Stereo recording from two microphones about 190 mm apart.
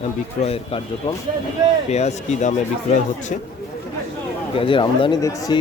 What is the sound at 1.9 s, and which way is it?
Speech, 35° left (ahead or behind).